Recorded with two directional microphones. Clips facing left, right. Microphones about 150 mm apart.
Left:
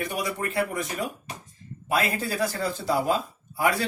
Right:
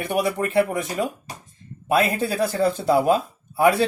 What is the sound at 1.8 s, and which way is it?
Speech, 60° right (ahead or behind).